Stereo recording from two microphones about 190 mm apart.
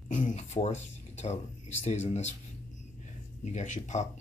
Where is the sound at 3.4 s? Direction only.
40° left (ahead or behind).